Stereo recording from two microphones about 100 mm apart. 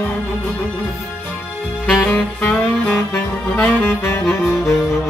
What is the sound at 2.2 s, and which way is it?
Saxophone, 10° left (ahead or behind).